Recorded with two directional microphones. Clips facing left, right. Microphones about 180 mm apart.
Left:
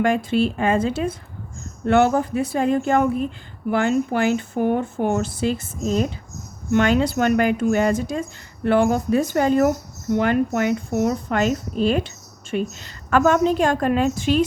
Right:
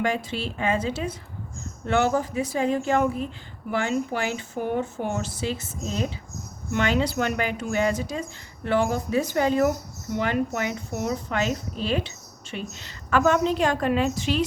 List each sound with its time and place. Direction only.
0.0 s a woman's voice: 55° left (ahead or behind)
6.7 s a woman's voice: 50° left (ahead or behind)